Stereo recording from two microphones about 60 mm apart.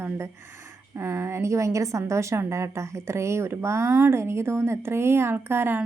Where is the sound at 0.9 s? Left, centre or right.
Right.